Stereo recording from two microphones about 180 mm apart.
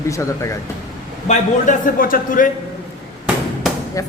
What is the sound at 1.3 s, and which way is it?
A man's voice, 45° left (ahead or behind).